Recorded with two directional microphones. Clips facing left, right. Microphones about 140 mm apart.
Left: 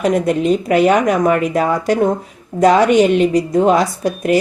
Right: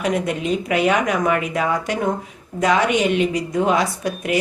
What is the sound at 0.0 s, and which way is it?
A woman's voice, 40° left (ahead or behind).